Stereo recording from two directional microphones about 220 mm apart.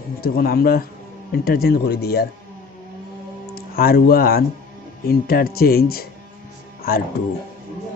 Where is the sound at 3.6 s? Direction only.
45° left (ahead or behind).